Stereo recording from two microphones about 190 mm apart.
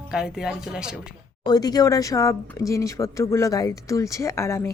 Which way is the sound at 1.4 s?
20° left (ahead or behind).